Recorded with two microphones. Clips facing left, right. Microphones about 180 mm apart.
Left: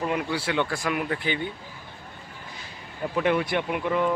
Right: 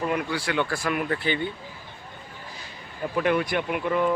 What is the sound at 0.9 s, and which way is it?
Speech, 15° left (ahead or behind).